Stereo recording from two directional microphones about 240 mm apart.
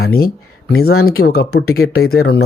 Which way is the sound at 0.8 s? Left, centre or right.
Left.